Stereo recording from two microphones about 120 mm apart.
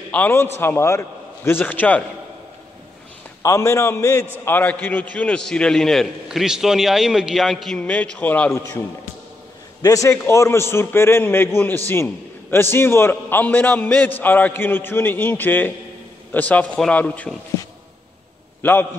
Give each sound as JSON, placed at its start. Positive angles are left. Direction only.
{"t": 0.1, "sound": "a man's voice", "side_deg": 15}
{"t": 3.4, "sound": "a man's voice", "side_deg": 25}
{"t": 7.8, "sound": "a man's voice", "side_deg": 10}
{"t": 9.8, "sound": "a man's voice", "side_deg": 30}
{"t": 18.6, "sound": "a man's voice", "side_deg": 15}